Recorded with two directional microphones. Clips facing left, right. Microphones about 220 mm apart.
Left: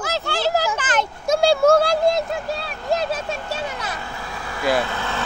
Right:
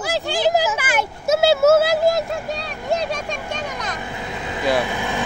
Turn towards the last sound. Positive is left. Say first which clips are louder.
# right 3 dB
turn(degrees=-15)  # may be behind; listen again after turning